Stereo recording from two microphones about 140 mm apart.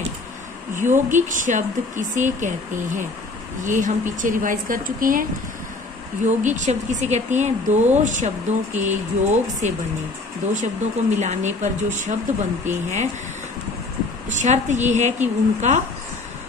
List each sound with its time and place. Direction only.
0.7 s speech: 65° right (ahead or behind); by 5.2 s 80° right
6.2 s speech: 60° right (ahead or behind)
14.3 s speech: 60° right (ahead or behind)